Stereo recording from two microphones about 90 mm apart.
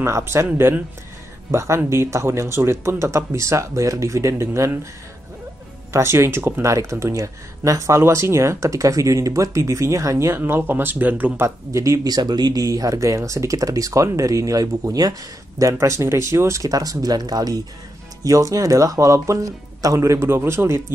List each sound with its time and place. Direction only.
0.0 s speech: 30° right (ahead or behind)
1.5 s speech: 35° right (ahead or behind)
5.9 s speech: 30° right (ahead or behind)
11.4 s speech: 35° right (ahead or behind)
15.6 s speech: 35° right (ahead or behind)